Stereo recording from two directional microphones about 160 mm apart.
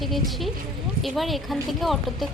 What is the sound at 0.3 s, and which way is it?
Speech, centre (ahead or behind).